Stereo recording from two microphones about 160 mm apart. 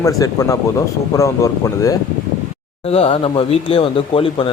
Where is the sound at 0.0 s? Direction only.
20° left (ahead or behind).